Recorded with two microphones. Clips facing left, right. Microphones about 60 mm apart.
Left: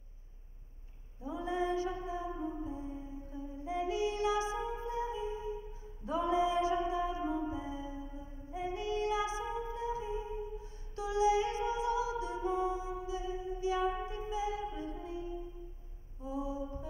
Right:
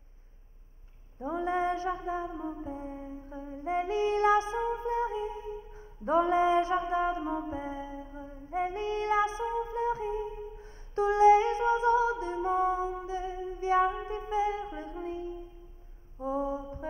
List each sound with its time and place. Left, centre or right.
1.2 s music: right
16.2 s mantra: right